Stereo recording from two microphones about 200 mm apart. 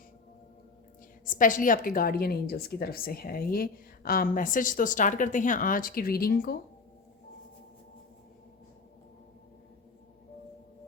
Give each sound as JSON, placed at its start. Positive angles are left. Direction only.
{"t": 1.2, "sound": "a woman's voice", "side_deg": 40}